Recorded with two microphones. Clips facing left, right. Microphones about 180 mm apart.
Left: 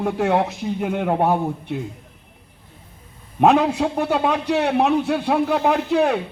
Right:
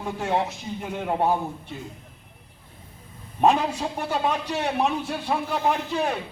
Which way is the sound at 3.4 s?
65° left (ahead or behind).